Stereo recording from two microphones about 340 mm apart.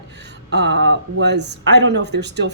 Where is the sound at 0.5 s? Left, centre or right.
Right.